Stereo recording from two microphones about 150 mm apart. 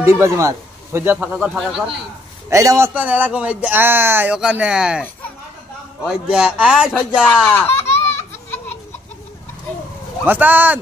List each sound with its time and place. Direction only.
0.0 s a man's voice: 15° right (ahead or behind)
2.5 s a man's voice: 20° right (ahead or behind)
2.9 s speech: 10° right (ahead or behind)
6.0 s speech: 5° right (ahead or behind)
7.4 s speech: 15° left (ahead or behind)
7.7 s baby laughter: 45° left (ahead or behind)
10.2 s speech: 10° right (ahead or behind)